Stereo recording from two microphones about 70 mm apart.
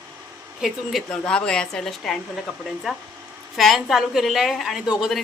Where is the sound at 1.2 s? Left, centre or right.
Centre.